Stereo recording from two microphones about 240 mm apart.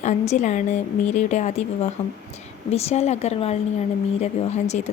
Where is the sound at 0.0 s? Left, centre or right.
Left.